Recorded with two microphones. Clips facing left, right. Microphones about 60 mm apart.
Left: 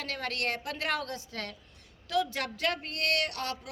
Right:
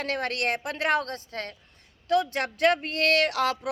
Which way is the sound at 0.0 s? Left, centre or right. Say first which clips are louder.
Right 6 dB; right.